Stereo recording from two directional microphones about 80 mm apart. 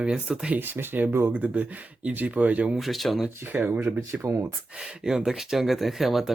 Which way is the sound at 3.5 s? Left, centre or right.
Right.